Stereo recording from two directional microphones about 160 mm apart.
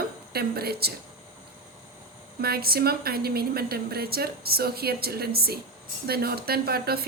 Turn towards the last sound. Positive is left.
turn(degrees=-75)  # may be behind; listen again after turning